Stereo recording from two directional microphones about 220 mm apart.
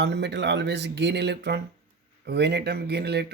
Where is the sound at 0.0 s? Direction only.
50° right (ahead or behind).